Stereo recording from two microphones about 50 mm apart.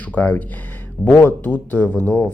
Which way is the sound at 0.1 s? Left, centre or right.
Left.